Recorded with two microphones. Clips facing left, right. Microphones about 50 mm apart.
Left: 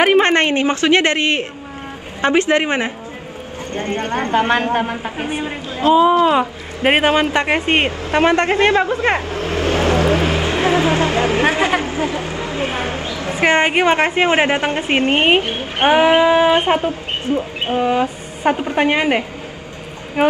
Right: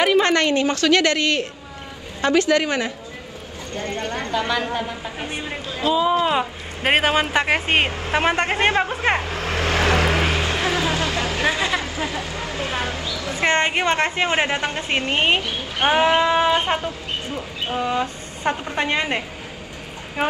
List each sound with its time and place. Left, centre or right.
0.0 s a woman's voice: left
5.1 s a woman's voice: left
5.7 s a woman's voice: left
6.2 s speech: centre
8.0 s a man's voice: left
9.7 s vehicle: left
10.2 s speech: left
13.5 s a woman's voice: centre
14.1 s a woman's voice: left
16.2 s a woman's voice: left
16.5 s a woman's voice: left
17.8 s a woman's voice: left